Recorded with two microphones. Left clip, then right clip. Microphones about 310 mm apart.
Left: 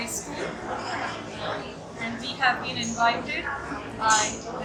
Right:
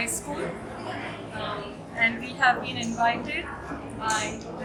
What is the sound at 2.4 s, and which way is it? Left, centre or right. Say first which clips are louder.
A woman's voice: right 1 dB; centre.